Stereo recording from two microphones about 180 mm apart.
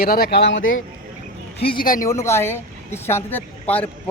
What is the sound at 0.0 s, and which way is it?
Speech, 55° left (ahead or behind).